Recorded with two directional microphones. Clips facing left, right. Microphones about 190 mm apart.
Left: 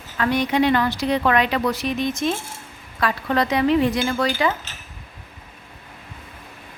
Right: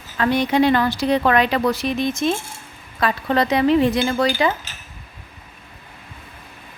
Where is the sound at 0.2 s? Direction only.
30° right (ahead or behind).